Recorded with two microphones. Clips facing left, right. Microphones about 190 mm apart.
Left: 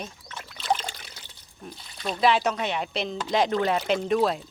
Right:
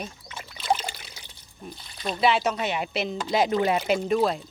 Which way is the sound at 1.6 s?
5° right (ahead or behind).